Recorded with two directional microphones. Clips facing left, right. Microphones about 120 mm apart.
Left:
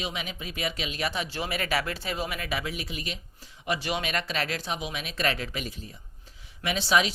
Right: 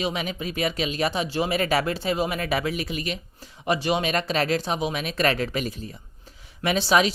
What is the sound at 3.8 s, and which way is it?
Speech, 25° right (ahead or behind).